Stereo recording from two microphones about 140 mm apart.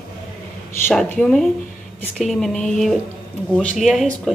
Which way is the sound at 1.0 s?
5° left (ahead or behind).